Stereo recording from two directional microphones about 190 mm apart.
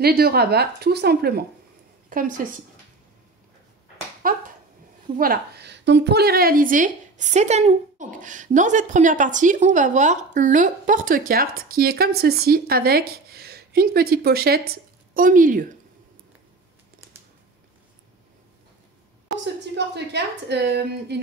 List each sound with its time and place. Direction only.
0.0 s a woman's voice: 55° right (ahead or behind)
2.0 s a woman's voice: 45° right (ahead or behind)
4.2 s a woman's voice: 45° right (ahead or behind)
19.7 s a woman's voice: 65° right (ahead or behind)